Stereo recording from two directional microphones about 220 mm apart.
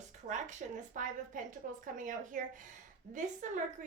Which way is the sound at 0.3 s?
35° right (ahead or behind).